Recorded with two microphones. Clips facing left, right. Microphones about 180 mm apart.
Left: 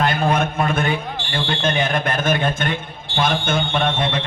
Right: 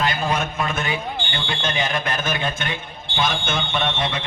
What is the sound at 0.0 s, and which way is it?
Fire alarm, 55° left (ahead or behind).